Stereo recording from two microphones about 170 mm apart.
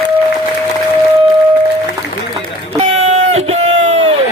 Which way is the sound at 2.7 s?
40° right (ahead or behind).